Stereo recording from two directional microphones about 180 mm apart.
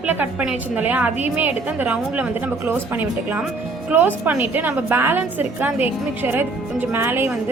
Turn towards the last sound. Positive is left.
turn(degrees=-15)  # may be behind; listen again after turning